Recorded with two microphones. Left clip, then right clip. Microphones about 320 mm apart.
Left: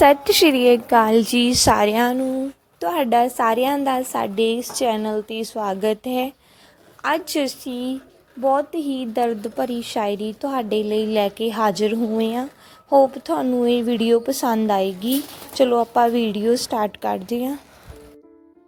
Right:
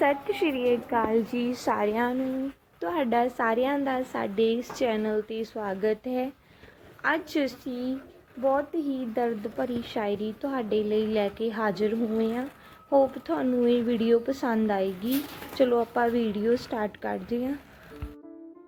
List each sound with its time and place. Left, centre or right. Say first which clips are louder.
0.0 s a woman's voice: left 12 dB; left